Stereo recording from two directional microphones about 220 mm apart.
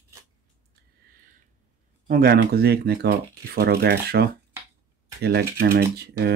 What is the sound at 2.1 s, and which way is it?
Speech, 45° right (ahead or behind).